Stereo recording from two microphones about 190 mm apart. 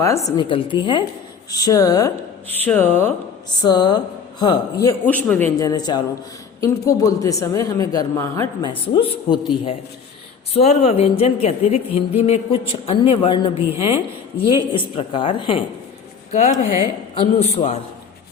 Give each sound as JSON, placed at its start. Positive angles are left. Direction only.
{"t": 0.0, "sound": "a woman's voice", "side_deg": 15}
{"t": 3.6, "sound": "a woman's voice", "side_deg": 20}
{"t": 5.0, "sound": "a woman's voice", "side_deg": 10}
{"t": 9.0, "sound": "a woman's voice", "side_deg": 30}
{"t": 16.3, "sound": "speech", "side_deg": 40}